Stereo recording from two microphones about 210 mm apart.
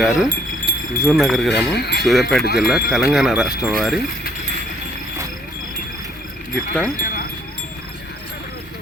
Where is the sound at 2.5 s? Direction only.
Centre (ahead or behind).